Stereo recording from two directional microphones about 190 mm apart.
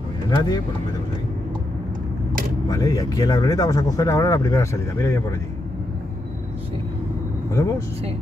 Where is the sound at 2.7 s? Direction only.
20° left (ahead or behind).